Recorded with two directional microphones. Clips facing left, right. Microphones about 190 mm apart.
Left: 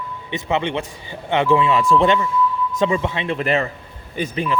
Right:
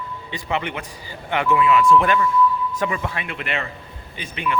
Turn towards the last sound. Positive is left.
turn(degrees=35)  # may be behind; listen again after turning